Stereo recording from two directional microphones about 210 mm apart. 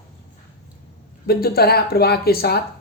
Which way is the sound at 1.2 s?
45° left (ahead or behind).